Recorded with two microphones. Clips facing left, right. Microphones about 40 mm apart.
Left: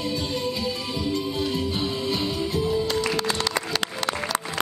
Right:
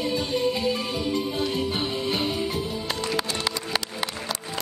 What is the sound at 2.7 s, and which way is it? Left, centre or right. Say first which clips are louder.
Music: left 5 dB; centre.